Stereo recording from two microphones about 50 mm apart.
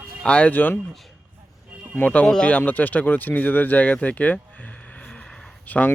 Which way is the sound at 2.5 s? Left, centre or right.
Left.